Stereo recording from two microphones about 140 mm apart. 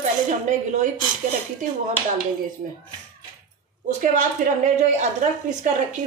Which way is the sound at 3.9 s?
60° right (ahead or behind).